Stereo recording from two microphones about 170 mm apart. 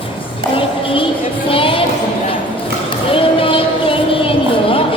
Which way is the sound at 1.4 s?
30° left (ahead or behind).